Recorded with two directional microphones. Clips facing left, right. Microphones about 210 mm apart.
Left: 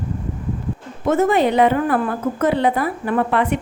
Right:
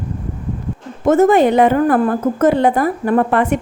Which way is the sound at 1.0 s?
45° right (ahead or behind).